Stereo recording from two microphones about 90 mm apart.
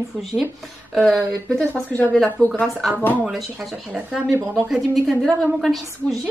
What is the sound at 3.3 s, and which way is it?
A woman's voice, centre (ahead or behind).